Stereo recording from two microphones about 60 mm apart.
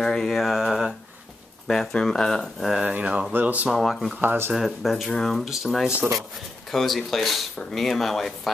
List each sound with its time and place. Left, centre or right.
0.0 s speech: centre
2.8 s speech: right
3.6 s speech: centre
4.2 s speech: right
4.6 s speech: centre